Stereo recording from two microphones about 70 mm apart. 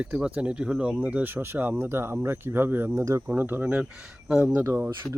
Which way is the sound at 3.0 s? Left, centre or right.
Right.